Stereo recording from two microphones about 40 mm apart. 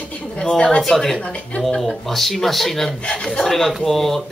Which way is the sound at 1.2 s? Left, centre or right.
Left.